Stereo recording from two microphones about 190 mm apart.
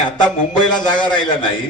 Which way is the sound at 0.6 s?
25° left (ahead or behind).